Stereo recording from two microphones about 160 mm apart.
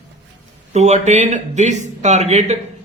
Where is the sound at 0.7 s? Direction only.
45° right (ahead or behind).